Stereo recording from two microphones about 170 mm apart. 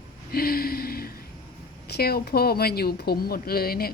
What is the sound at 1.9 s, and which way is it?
Speech, 65° left (ahead or behind).